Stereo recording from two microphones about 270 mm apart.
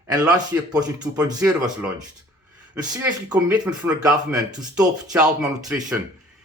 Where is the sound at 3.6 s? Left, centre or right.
Centre.